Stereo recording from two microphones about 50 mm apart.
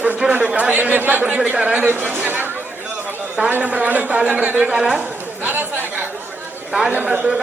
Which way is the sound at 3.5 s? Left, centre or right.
Right.